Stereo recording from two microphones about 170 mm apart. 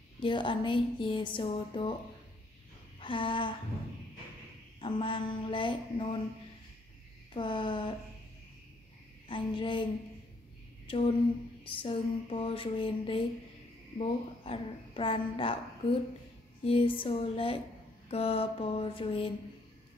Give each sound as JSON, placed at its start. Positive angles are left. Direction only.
{"t": 0.2, "sound": "a woman's voice", "side_deg": 30}
{"t": 3.0, "sound": "a sound", "side_deg": 30}
{"t": 4.7, "sound": "a woman's voice", "side_deg": 30}
{"t": 7.3, "sound": "a woman's voice", "side_deg": 30}
{"t": 9.3, "sound": "a woman's voice", "side_deg": 30}
{"t": 10.9, "sound": "a sound", "side_deg": 30}
{"t": 11.6, "sound": "a child's voice", "side_deg": 30}